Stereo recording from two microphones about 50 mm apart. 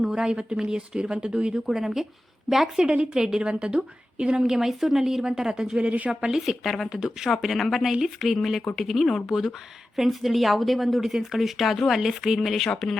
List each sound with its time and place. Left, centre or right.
0.0 s a woman's voice: centre
4.5 s speech: centre
6.6 s speech: centre
6.9 s speech: centre
12.4 s speech: centre